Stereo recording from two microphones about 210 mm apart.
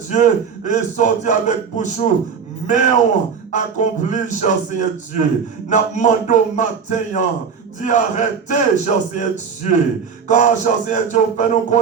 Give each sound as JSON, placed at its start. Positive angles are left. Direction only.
{"t": 0.1, "sound": "speech", "side_deg": 35}
{"t": 10.2, "sound": "speech", "side_deg": 35}